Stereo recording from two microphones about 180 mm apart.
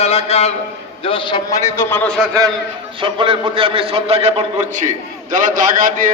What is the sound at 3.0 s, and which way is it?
A man's voice, 30° right (ahead or behind).